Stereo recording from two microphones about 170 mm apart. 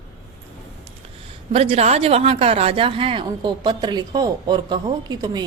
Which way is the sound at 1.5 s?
35° right (ahead or behind).